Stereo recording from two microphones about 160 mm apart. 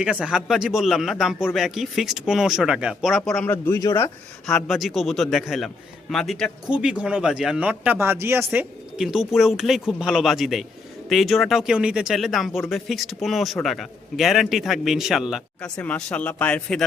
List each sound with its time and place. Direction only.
0.0 s a man's voice: 5° right (ahead or behind); by 4.1 s 20° left (ahead or behind)
4.4 s a man's voice: centre (ahead or behind); by 8.6 s 15° right (ahead or behind)
9.0 s a man's voice: centre (ahead or behind)